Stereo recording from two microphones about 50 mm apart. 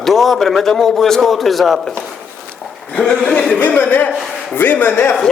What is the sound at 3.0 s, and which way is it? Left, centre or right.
Speech, centre.